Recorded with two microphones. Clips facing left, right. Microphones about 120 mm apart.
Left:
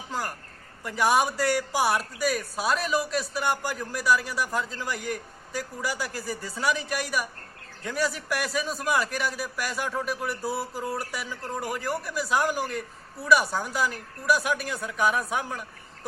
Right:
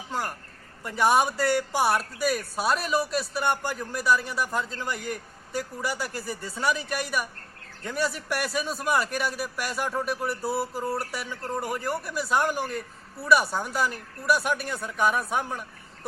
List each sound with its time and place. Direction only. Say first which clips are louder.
0.1 s a man's voice: right 1 dB; centre (ahead or behind)